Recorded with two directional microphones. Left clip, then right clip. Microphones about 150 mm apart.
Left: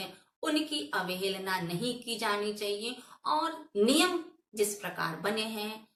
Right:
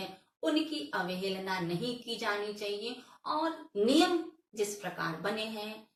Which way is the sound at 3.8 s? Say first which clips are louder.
Left 1 dB; 25° left (ahead or behind).